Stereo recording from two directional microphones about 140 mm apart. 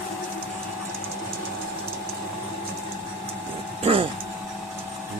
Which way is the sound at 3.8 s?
40° right (ahead or behind).